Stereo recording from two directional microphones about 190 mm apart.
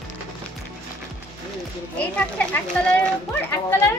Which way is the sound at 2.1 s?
5° left (ahead or behind).